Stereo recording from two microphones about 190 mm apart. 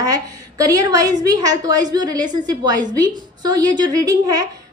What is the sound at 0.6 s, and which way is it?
A woman's voice, 20° right (ahead or behind).